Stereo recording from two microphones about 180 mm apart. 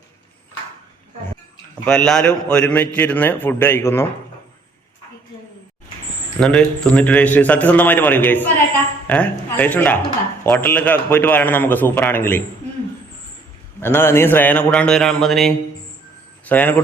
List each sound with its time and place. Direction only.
1.8 s a man's voice: 5° left (ahead or behind)
6.4 s a man's voice: 5° left (ahead or behind)
13.8 s a man's voice: 15° left (ahead or behind)